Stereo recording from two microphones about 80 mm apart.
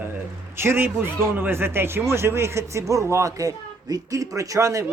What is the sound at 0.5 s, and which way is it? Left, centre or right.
Speech, right.